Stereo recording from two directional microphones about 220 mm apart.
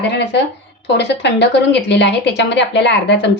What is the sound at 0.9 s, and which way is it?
A woman's voice, 50° left (ahead or behind).